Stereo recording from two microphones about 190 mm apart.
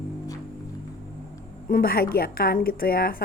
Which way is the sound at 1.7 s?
50° left (ahead or behind).